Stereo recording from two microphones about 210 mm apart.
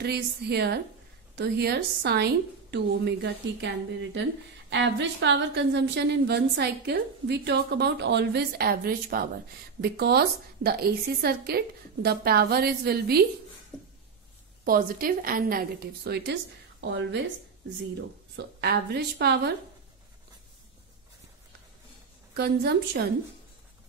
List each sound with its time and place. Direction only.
0.0 s a woman's voice: 50° right (ahead or behind)
14.6 s a woman's voice: 45° right (ahead or behind)
18.3 s a woman's voice: 50° right (ahead or behind)
22.3 s a woman's voice: 50° right (ahead or behind)